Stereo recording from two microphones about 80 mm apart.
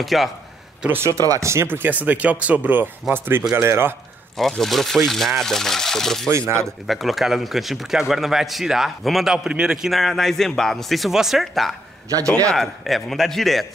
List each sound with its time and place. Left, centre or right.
0.0 s speech: centre
0.8 s speech: right
1.1 s speech: right
1.5 s speech: right
4.4 s speech: centre
6.3 s speech: right
6.6 s speech: centre